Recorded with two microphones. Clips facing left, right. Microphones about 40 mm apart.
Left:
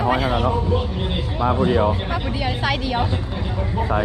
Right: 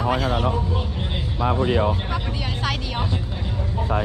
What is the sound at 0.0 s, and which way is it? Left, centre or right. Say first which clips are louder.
Vehicle: left 3 dB; centre.